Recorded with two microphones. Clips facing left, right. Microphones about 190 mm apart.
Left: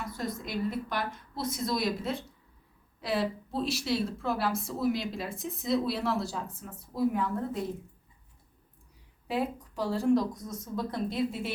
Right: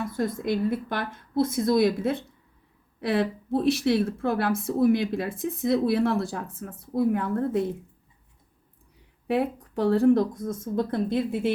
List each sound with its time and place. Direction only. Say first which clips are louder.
0.0 s a woman's voice: right 8 dB; 55° right (ahead or behind)
9.2 s a woman's voice: right 6 dB; 60° right (ahead or behind)